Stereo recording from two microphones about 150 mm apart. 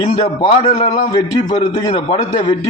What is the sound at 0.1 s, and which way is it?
Speech, 55° left (ahead or behind).